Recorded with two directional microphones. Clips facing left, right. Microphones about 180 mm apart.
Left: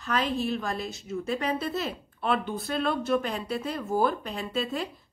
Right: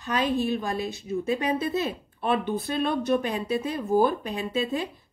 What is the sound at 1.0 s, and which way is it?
Speech, 15° right (ahead or behind).